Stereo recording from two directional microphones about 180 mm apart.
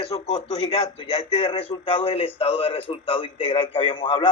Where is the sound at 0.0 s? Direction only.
35° left (ahead or behind).